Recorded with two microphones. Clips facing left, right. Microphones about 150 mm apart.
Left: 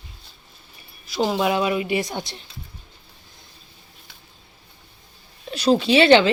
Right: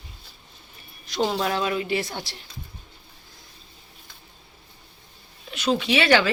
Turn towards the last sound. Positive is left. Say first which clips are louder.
# left 6 dB
turn(degrees=25)  # may be behind; listen again after turning